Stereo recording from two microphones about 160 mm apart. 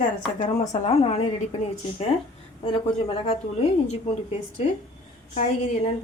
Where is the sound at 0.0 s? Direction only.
45° left (ahead or behind).